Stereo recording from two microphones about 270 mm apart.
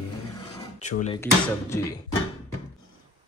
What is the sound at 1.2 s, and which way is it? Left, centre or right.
Speech, centre.